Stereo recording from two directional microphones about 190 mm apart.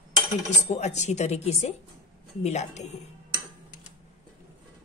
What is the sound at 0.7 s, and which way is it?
Speech, 35° left (ahead or behind).